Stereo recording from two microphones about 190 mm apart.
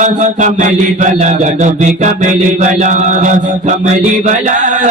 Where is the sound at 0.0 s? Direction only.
40° right (ahead or behind).